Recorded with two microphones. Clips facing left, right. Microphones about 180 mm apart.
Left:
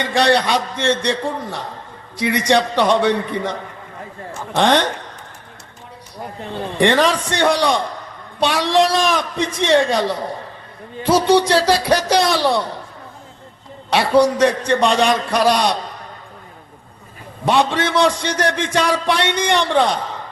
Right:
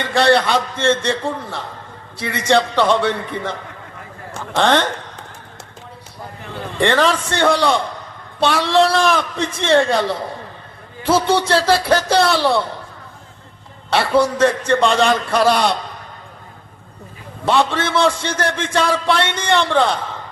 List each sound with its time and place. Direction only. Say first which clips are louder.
0.0 s a man's voice: right 1 dB; 15° left (ahead or behind)
4.5 s a man's voice: even; 15° left (ahead or behind)
6.7 s a man's voice: left 1 dB; 15° left (ahead or behind)
13.9 s a man's voice: left 2 dB; 15° left (ahead or behind)
17.4 s a man's voice: even; 15° left (ahead or behind)